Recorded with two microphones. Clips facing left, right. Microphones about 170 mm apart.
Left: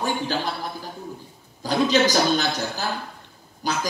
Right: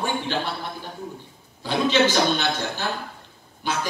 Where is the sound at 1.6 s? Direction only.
40° left (ahead or behind).